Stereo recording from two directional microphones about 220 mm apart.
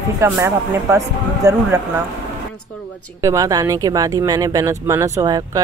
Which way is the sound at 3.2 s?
15° right (ahead or behind).